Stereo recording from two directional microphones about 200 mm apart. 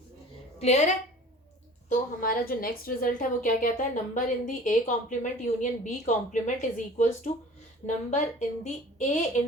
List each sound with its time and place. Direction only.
0.6 s a woman's voice: 35° left (ahead or behind)
1.9 s a woman's voice: 45° left (ahead or behind)